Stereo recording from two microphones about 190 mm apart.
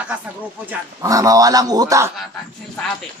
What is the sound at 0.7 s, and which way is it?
A man's voice, 20° right (ahead or behind).